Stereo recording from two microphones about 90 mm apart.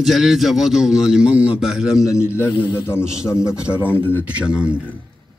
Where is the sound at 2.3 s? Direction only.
25° left (ahead or behind).